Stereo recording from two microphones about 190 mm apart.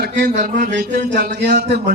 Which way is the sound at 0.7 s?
55° right (ahead or behind).